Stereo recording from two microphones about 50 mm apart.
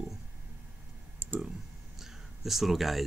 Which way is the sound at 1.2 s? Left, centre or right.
Right.